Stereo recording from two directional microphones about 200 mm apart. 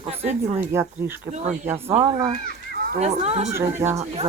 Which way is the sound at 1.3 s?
35° right (ahead or behind).